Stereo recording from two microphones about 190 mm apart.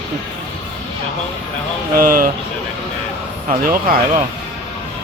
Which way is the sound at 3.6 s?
50° right (ahead or behind).